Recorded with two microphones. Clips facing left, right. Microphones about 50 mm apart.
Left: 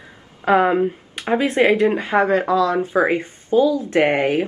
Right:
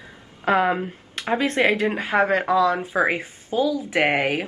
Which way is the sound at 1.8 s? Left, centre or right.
Centre.